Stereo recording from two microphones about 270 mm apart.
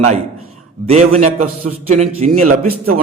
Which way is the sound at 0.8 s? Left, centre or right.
Right.